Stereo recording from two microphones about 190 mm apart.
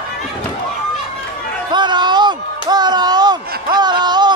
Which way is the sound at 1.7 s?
25° right (ahead or behind).